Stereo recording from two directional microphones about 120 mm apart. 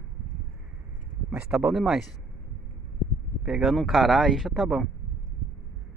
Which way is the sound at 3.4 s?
5° right (ahead or behind).